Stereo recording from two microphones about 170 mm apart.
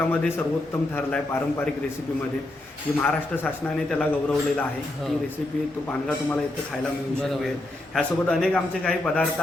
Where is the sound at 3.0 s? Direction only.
10° left (ahead or behind).